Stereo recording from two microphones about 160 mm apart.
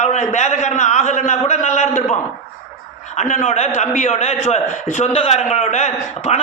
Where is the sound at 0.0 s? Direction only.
45° left (ahead or behind).